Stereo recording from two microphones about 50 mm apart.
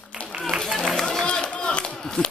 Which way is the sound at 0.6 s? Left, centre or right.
Centre.